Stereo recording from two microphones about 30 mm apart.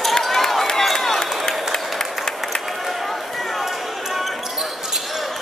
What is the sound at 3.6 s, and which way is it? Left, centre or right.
Basketball bounce, centre.